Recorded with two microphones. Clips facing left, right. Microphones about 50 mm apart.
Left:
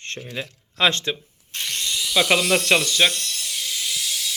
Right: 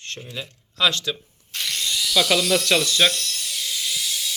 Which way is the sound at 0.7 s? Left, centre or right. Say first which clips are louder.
Left 2 dB; left.